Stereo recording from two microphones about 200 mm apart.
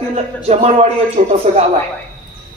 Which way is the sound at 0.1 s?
30° right (ahead or behind).